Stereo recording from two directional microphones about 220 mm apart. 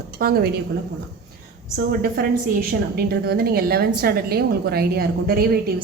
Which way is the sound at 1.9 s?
45° right (ahead or behind).